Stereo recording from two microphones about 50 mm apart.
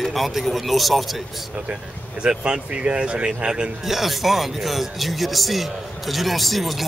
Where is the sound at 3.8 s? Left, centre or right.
Centre.